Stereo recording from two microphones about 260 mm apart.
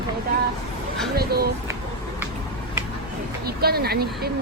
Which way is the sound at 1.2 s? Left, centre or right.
Right.